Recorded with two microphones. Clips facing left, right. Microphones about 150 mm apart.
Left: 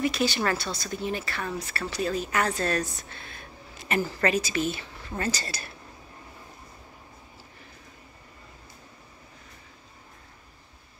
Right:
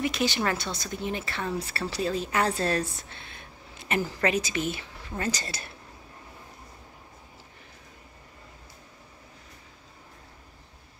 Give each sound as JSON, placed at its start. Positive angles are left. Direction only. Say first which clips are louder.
{"t": 0.0, "sound": "speech", "louder": "left 1 dB", "side_deg": -20}